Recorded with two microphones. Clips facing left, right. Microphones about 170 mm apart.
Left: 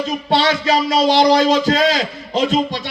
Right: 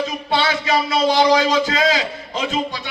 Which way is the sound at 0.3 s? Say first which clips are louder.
Left 4 dB; 35° left (ahead or behind).